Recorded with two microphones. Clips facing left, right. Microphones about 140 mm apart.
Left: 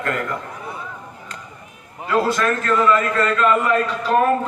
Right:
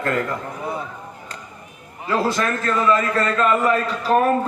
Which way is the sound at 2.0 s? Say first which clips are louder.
Left 2 dB; 30° right (ahead or behind).